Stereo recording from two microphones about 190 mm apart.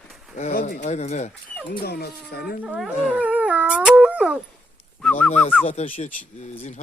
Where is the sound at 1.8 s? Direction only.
55° left (ahead or behind).